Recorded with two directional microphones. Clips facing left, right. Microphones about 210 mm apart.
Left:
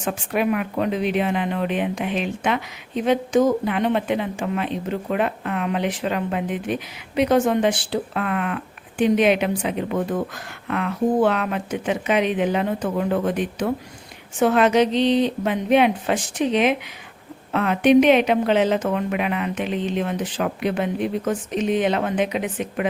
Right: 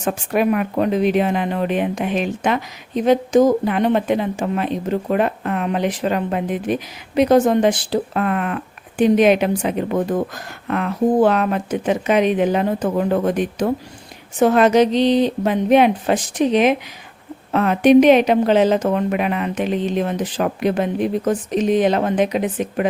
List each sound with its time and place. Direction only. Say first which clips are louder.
0.0 s speech: right 4 dB; 45° right (ahead or behind)